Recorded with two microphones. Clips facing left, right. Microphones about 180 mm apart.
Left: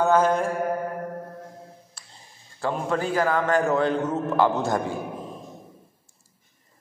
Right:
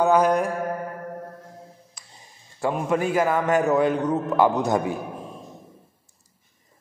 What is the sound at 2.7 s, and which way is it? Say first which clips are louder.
A man's voice: right 2 dB; 20° right (ahead or behind).